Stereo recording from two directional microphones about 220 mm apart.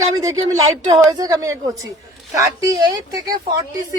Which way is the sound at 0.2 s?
15° right (ahead or behind).